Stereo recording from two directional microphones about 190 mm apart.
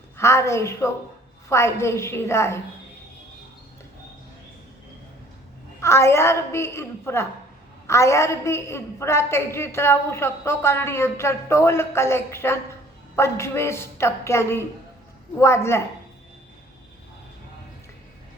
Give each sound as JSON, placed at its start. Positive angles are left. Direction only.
{"t": 0.2, "sound": "a woman's voice", "side_deg": 15}
{"t": 5.8, "sound": "a woman's voice", "side_deg": 15}